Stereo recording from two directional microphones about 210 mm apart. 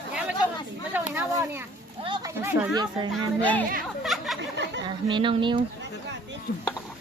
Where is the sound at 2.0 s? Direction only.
20° right (ahead or behind).